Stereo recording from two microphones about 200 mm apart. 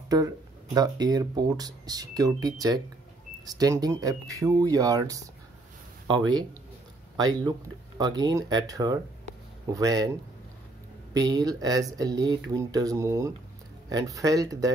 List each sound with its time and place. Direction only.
0.7 s speech: 20° right (ahead or behind)
11.1 s speech: 20° right (ahead or behind)